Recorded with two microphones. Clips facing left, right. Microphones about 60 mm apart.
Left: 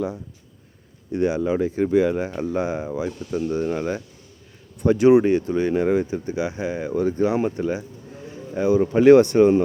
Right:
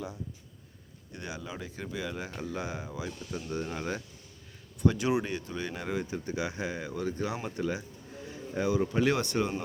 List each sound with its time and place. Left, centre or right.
1.1 s speech: left; by 4.0 s centre
4.8 s speech: left